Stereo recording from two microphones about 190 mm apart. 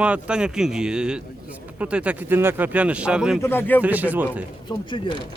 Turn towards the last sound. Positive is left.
turn(degrees=25)  # may be behind; listen again after turning